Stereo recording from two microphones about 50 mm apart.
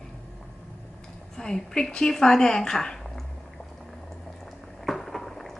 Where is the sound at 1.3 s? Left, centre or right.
Centre.